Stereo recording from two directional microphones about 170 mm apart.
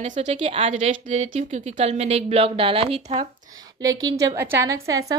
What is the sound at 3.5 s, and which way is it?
A woman's voice, 20° right (ahead or behind).